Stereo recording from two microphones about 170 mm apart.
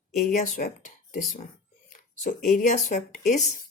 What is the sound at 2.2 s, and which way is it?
Speech, 50° left (ahead or behind).